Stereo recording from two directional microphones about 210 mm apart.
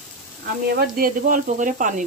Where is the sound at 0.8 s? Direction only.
40° right (ahead or behind).